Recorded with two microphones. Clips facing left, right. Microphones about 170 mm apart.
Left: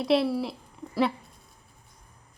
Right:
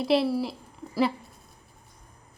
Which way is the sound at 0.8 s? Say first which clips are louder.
Left 1 dB; 20° left (ahead or behind).